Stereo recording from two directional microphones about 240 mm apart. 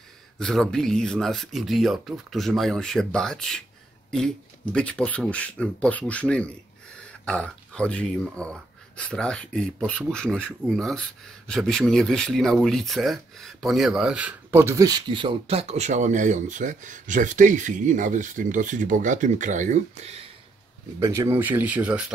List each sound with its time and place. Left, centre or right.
0.4 s speech: centre
4.7 s speech: centre; by 20.2 s right
21.0 s speech: centre